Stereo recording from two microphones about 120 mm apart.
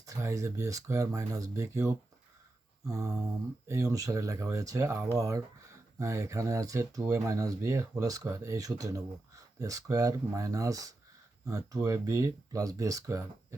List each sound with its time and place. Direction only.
0.0 s speech: 25° right (ahead or behind)